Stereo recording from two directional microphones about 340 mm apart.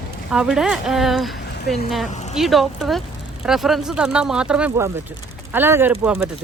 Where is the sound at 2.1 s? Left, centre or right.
Centre.